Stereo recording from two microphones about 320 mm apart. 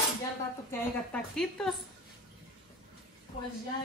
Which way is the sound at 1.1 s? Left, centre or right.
Centre.